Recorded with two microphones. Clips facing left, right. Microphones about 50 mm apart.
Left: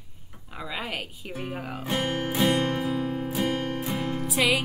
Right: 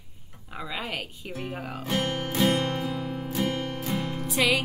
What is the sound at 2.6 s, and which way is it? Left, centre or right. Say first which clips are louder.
Music: left 2 dB; left.